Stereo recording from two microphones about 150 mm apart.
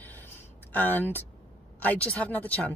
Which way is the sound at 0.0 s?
10° left (ahead or behind).